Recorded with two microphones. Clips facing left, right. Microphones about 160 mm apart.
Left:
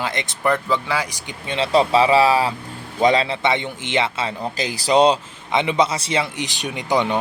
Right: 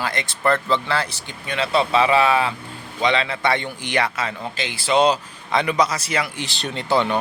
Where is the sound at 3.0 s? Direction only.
45° left (ahead or behind).